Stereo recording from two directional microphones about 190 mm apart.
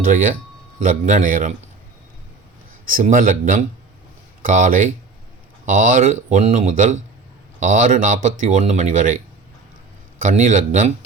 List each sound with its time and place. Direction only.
0.8 s a man's voice: 40° right (ahead or behind)
2.9 s a man's voice: 45° right (ahead or behind)
10.2 s speech: 40° right (ahead or behind)